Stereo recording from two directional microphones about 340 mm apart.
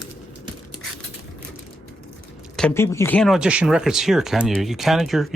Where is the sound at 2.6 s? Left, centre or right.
Centre.